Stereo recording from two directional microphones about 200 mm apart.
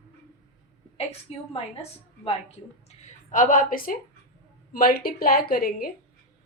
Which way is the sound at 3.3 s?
40° left (ahead or behind).